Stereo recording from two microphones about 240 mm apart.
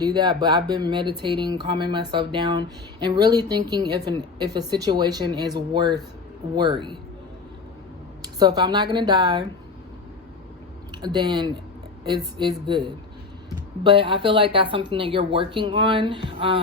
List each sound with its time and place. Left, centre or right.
0.0 s a woman's voice: centre
8.4 s a woman's voice: centre
11.0 s speech: centre